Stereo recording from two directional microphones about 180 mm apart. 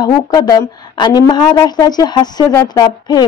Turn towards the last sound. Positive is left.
turn(degrees=20)  # may be behind; listen again after turning